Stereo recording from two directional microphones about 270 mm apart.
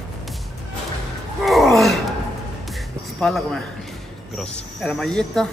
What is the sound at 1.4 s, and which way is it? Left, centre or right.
Gasp, centre.